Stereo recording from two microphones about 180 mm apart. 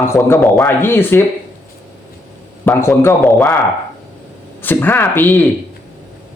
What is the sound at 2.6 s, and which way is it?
Speech, 15° left (ahead or behind).